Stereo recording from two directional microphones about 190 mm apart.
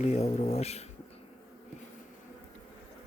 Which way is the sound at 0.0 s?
35° left (ahead or behind).